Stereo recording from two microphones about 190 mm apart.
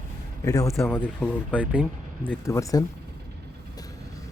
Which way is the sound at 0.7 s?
Centre (ahead or behind).